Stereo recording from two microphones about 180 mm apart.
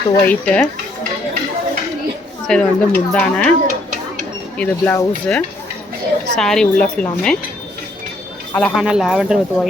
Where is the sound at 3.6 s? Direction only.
45° right (ahead or behind).